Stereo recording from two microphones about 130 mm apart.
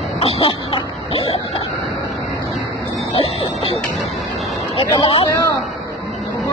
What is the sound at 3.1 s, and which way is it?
Speech, 50° left (ahead or behind).